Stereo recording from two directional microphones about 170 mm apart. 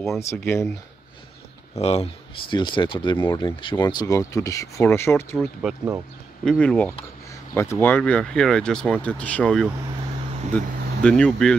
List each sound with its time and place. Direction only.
0.2 s speech: 15° left (ahead or behind)
1.8 s speech: 40° left (ahead or behind)
2.5 s speech: 25° left (ahead or behind); by 11.5 s 5° left (ahead or behind)